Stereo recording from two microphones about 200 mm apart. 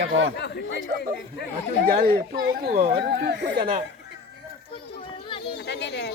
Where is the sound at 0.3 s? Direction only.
60° left (ahead or behind).